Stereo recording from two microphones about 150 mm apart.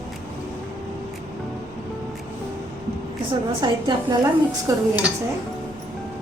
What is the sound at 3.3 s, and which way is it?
A woman's voice, 30° right (ahead or behind).